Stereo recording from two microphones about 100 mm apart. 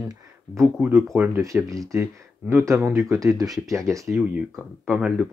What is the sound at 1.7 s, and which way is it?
Speech, 30° right (ahead or behind).